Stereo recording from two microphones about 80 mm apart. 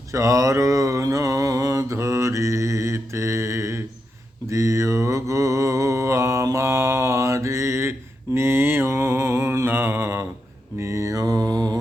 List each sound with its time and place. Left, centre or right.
0.1 s mantra: right